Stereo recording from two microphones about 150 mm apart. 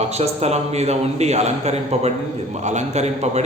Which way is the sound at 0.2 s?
45° right (ahead or behind).